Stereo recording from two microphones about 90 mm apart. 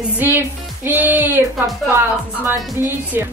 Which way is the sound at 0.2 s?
25° right (ahead or behind).